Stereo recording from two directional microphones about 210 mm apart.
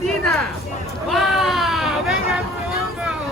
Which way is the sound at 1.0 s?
Centre (ahead or behind).